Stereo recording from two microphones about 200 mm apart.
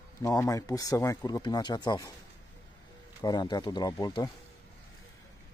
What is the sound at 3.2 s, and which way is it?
Speech, 20° left (ahead or behind).